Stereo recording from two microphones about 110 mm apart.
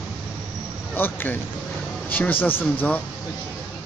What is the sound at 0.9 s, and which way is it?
Speech, 20° left (ahead or behind).